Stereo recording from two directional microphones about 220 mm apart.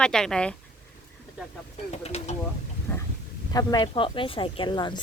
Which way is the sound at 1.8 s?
30° left (ahead or behind).